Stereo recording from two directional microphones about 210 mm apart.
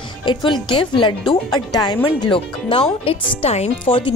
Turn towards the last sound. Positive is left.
turn(degrees=25)  # may be behind; listen again after turning